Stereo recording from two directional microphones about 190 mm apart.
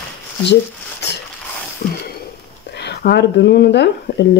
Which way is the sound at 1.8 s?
55° left (ahead or behind).